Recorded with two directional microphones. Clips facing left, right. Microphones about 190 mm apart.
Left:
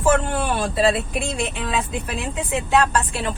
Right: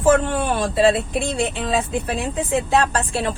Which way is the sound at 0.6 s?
30° right (ahead or behind).